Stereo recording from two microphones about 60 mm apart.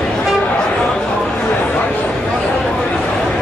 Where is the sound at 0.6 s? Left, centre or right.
Centre.